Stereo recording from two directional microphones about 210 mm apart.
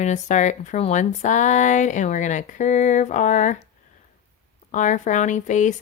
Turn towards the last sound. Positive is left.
turn(degrees=35)  # may be behind; listen again after turning